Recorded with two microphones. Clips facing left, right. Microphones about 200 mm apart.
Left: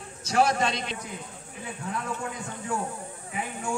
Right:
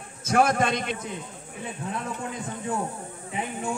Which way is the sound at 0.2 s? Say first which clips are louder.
Right 2 dB; 50° right (ahead or behind).